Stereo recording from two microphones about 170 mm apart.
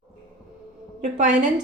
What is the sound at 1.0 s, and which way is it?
Speech, 45° right (ahead or behind).